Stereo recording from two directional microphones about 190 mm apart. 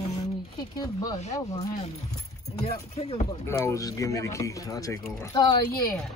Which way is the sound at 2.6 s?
35° left (ahead or behind).